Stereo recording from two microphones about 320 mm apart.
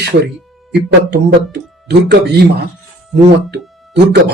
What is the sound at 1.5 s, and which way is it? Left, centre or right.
Speech, right.